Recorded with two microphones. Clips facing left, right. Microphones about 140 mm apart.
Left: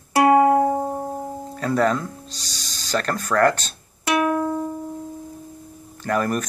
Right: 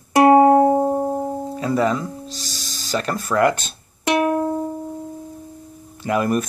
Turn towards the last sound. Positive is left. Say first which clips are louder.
# right 3 dB
turn(degrees=-10)  # may be behind; listen again after turning